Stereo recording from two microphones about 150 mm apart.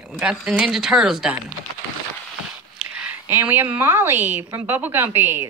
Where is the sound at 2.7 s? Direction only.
5° right (ahead or behind).